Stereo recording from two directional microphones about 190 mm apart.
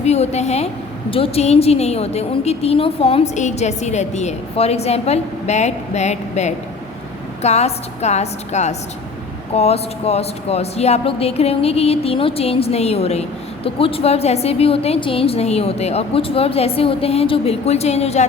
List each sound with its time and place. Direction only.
0.0 s a woman's voice: 35° left (ahead or behind)